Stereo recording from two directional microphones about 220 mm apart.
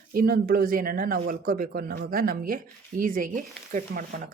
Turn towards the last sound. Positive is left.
turn(degrees=-40)  # may be behind; listen again after turning